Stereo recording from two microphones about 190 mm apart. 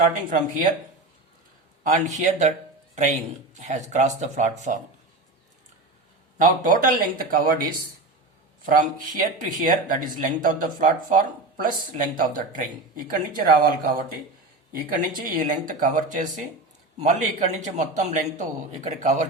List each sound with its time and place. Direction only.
0.3 s speech: 45° right (ahead or behind)
1.8 s a man's voice: 40° right (ahead or behind)
6.4 s speech: 45° right (ahead or behind)
8.6 s a man's voice: 45° right (ahead or behind)